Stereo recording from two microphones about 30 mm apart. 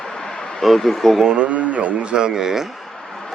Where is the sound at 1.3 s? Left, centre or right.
Right.